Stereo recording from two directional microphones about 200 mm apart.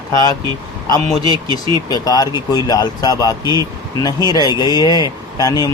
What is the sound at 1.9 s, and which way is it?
Speech, 20° left (ahead or behind).